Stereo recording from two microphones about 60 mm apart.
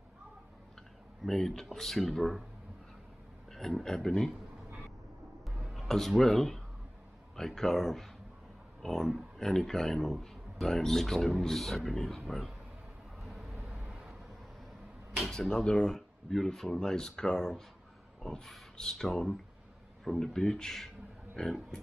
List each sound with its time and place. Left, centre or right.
1.2 s speech: centre
3.5 s speech: centre
5.4 s a sound: centre
7.3 s speech: centre
13.2 s vehicle: centre
15.4 s speech: centre